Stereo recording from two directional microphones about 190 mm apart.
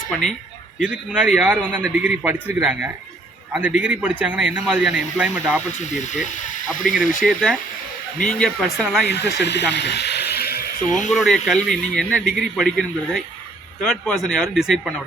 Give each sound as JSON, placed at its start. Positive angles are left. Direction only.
{"t": 0.8, "sound": "a man's voice", "side_deg": -5}
{"t": 5.8, "sound": "speech", "side_deg": 40}
{"t": 8.2, "sound": "a man's voice", "side_deg": 5}
{"t": 9.0, "sound": "speech", "side_deg": 60}
{"t": 11.1, "sound": "a man's voice", "side_deg": 0}